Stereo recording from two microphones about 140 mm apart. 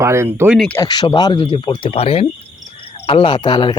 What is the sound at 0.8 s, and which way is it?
Speech, 30° left (ahead or behind).